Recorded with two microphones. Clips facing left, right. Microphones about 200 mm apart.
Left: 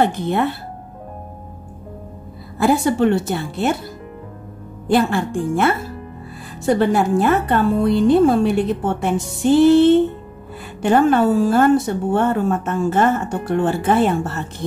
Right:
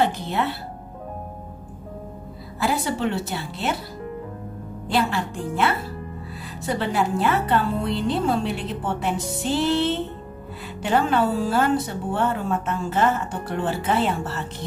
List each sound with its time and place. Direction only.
0.0 s a woman's voice: 50° left (ahead or behind)
2.6 s a woman's voice: 50° left (ahead or behind)
4.8 s a woman's voice: 50° left (ahead or behind)